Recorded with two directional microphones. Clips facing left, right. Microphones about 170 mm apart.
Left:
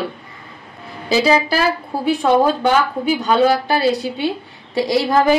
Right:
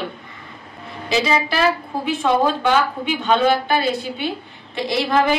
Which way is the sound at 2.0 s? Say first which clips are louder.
Left 4 dB; 35° left (ahead or behind).